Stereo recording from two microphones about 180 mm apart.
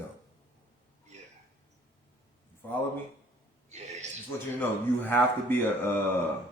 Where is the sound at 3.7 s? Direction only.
40° right (ahead or behind).